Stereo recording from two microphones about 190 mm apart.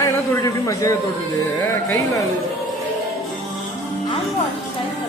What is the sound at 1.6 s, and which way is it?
Speech, 15° left (ahead or behind).